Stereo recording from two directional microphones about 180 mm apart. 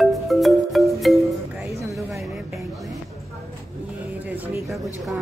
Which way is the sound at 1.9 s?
Centre (ahead or behind).